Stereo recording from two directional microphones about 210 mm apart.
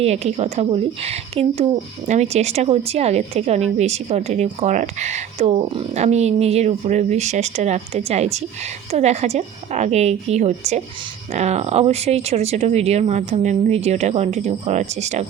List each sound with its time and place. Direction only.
0.0 s speech: 30° right (ahead or behind)